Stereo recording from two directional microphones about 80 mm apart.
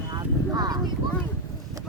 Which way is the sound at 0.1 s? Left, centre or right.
Right.